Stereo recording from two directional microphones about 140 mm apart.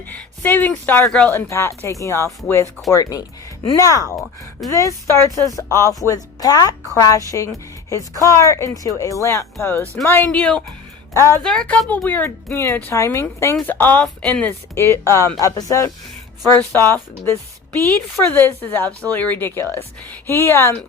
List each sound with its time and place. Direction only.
0.4 s speech: 15° left (ahead or behind)
1.3 s speech: 15° left (ahead or behind)
11.1 s a woman's voice: 20° left (ahead or behind)
11.4 s speech: 5° left (ahead or behind)
18.3 s speech: 15° left (ahead or behind)